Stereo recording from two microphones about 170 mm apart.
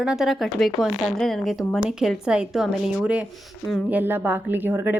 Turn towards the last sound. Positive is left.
turn(degrees=-10)  # may be behind; listen again after turning